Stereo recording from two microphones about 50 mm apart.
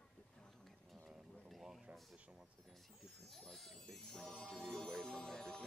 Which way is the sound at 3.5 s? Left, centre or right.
Centre.